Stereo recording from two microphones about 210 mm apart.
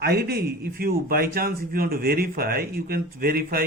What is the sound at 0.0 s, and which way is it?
A man's voice, 50° right (ahead or behind).